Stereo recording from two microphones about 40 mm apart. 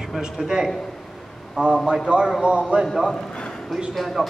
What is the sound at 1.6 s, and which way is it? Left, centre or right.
Speech, right.